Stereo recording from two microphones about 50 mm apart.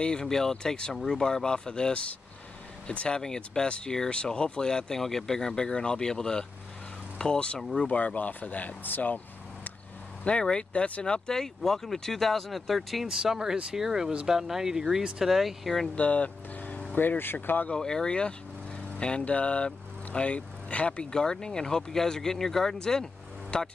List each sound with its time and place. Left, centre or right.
0.0 s speech: centre
7.8 s speech: left
10.2 s speech: centre
16.0 s vehicle: left
16.9 s speech: left
17.7 s speech: centre